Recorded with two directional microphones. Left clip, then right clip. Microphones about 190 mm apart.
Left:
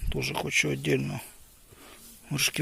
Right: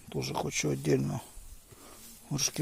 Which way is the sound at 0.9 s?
Centre (ahead or behind).